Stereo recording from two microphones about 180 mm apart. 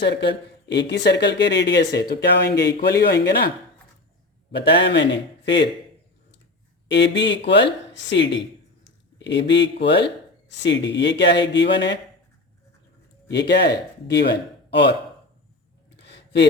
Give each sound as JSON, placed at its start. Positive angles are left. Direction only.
{"t": 0.0, "sound": "speech", "side_deg": 70}
{"t": 4.5, "sound": "speech", "side_deg": 70}
{"t": 6.8, "sound": "speech", "side_deg": 75}
{"t": 13.3, "sound": "speech", "side_deg": 65}
{"t": 16.0, "sound": "a sound", "side_deg": 70}